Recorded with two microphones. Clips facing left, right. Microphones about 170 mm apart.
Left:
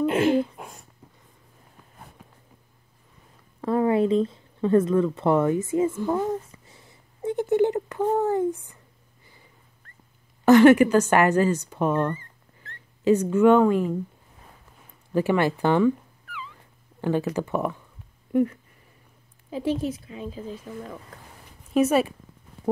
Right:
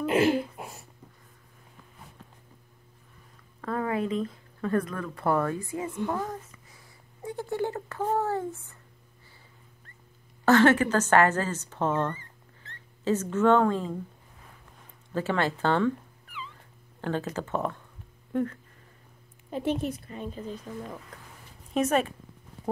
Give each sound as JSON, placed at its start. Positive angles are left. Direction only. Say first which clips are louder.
{"t": 0.0, "sound": "a sound", "louder": "left 3 dB", "side_deg": 0}
{"t": 3.6, "sound": "speech", "louder": "left 8 dB", "side_deg": 30}
{"t": 10.4, "sound": "speech", "louder": "left 6 dB", "side_deg": 15}
{"t": 15.1, "sound": "speech", "louder": "left 6 dB", "side_deg": 15}
{"t": 17.0, "sound": "speech", "louder": "left 6 dB", "side_deg": 10}
{"t": 19.5, "sound": "a woman's voice", "louder": "left 3 dB", "side_deg": 0}
{"t": 21.7, "sound": "speech", "louder": "left 5 dB", "side_deg": 10}